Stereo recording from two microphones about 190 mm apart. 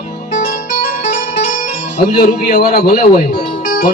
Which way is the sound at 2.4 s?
50° left (ahead or behind).